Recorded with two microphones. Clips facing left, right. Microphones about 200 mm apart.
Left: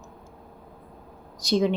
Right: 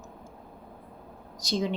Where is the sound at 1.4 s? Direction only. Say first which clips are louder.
Left 7 dB; 60° left (ahead or behind).